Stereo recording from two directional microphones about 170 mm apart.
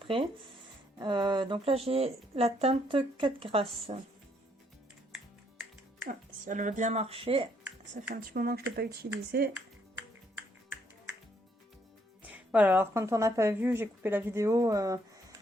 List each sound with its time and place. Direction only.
0.9 s speech: 25° right (ahead or behind)
6.1 s speech: 50° right (ahead or behind); by 7.5 s 35° right (ahead or behind)
8.0 s speech: 65° right (ahead or behind)
12.5 s a woman's voice: 10° right (ahead or behind)